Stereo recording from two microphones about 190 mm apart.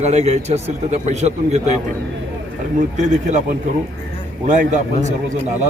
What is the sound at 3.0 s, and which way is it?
Speech, 40° right (ahead or behind).